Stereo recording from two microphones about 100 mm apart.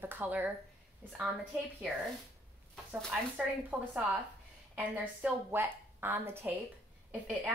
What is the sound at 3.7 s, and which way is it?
A woman's voice, 20° right (ahead or behind).